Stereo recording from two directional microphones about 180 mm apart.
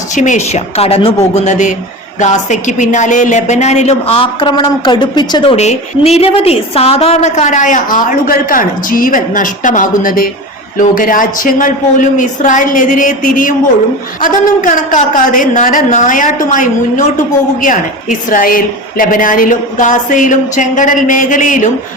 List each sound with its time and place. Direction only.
0.2 s a woman's voice: 40° left (ahead or behind)